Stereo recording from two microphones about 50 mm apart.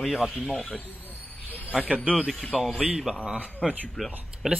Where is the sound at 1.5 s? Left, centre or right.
Left.